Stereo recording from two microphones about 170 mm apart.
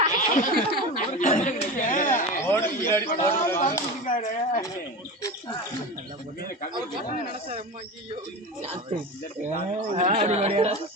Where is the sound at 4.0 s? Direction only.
50° left (ahead or behind).